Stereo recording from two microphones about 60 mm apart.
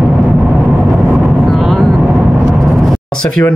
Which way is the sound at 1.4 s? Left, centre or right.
Centre.